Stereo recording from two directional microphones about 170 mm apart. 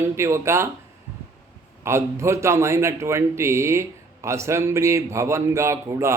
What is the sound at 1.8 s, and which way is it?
A man's voice, 15° right (ahead or behind).